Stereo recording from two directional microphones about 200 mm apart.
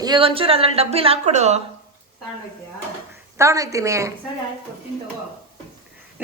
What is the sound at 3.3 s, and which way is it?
Speech, 15° right (ahead or behind).